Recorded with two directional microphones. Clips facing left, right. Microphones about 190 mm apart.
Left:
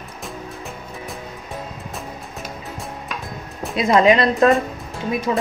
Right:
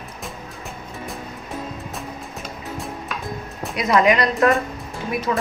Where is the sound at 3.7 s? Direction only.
30° left (ahead or behind).